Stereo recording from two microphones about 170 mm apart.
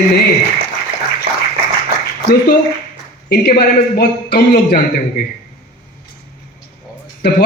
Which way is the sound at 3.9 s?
65° left (ahead or behind).